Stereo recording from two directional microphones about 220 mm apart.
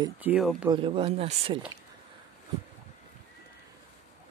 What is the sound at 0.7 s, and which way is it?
Speech, 25° right (ahead or behind).